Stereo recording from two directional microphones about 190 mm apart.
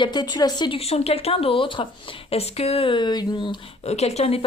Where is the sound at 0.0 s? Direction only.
20° left (ahead or behind).